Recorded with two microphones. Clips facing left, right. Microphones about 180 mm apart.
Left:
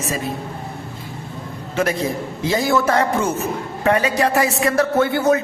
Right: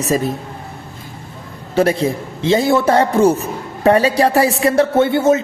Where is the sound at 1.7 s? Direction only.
30° right (ahead or behind).